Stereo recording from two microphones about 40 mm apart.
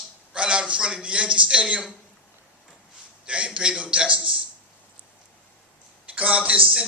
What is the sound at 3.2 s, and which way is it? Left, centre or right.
A man's voice, right.